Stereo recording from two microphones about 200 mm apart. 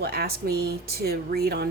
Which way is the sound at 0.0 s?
50° right (ahead or behind).